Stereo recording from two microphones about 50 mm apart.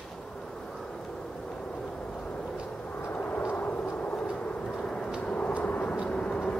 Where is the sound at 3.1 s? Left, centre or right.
Left; by 5.1 s centre.